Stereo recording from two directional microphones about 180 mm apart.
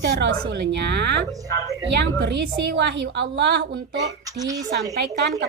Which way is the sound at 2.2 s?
65° right (ahead or behind).